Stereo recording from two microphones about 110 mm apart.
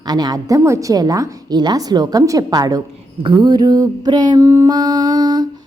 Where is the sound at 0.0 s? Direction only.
40° right (ahead or behind).